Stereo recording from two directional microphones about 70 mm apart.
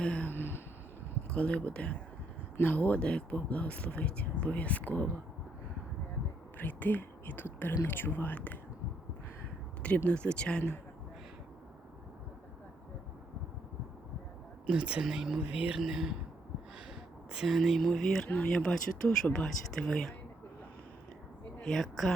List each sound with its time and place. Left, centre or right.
0.0 s a sound: centre
0.3 s a sound: left
1.3 s speech: centre
6.6 s speech: left
10.1 s speech: centre
14.7 s speech: centre
15.8 s speech: centre
17.3 s speech: centre
18.3 s speech: centre
21.6 s speech: centre